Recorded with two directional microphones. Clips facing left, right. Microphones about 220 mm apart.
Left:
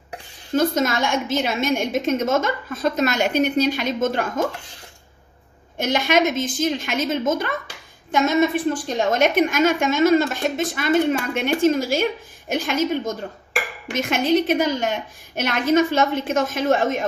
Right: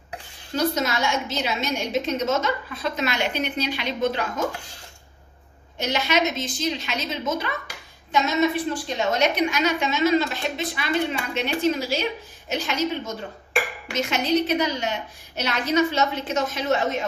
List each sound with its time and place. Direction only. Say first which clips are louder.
0.5 s a woman's voice: left 4 dB; 50° left (ahead or behind)
5.7 s a woman's voice: left 4 dB; 50° left (ahead or behind)
13.9 s a woman's voice: left 3 dB; 50° left (ahead or behind)